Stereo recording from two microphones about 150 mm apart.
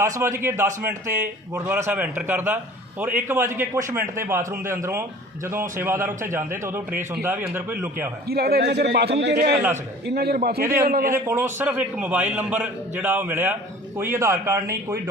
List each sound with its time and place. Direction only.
0.0 s a man's voice: 20° right (ahead or behind)
8.3 s a man's voice: 90° right
10.2 s a man's voice: 90° right
10.8 s a man's voice: 70° right (ahead or behind)
11.1 s a man's voice: 15° right (ahead or behind)